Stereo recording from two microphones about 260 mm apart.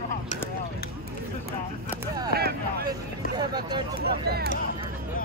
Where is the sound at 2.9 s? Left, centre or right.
Centre.